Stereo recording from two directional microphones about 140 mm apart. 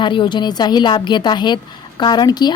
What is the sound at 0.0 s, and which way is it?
A woman's voice, 35° left (ahead or behind).